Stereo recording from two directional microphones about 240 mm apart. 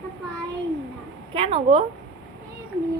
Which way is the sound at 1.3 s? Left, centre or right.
Right.